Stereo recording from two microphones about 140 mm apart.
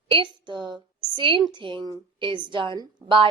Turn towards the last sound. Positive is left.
turn(degrees=-35)  # may be behind; listen again after turning